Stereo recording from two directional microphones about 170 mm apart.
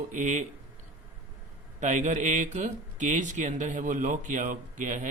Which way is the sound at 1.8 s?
45° right (ahead or behind).